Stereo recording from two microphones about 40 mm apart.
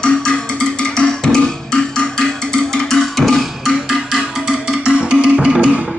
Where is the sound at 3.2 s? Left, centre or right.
Centre.